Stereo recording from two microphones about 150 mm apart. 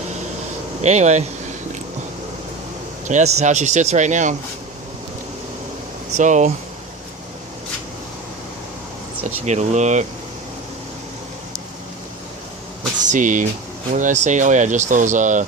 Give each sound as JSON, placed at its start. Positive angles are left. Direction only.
{"t": 0.8, "sound": "speech", "side_deg": -50}
{"t": 3.1, "sound": "speech", "side_deg": -50}
{"t": 6.1, "sound": "speech", "side_deg": -55}
{"t": 9.2, "sound": "speech", "side_deg": -50}
{"t": 13.1, "sound": "speech", "side_deg": -60}